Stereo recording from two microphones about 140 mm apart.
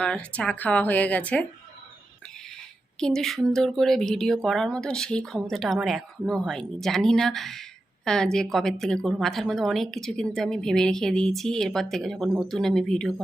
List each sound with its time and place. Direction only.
0.0 s speech: 10° left (ahead or behind)
3.0 s speech: 5° left (ahead or behind)